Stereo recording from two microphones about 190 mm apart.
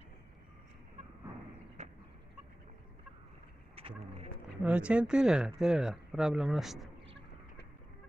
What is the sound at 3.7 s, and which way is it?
Bird, 30° right (ahead or behind).